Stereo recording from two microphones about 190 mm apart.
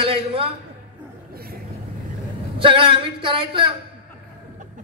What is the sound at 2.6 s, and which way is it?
A man's voice, 25° right (ahead or behind).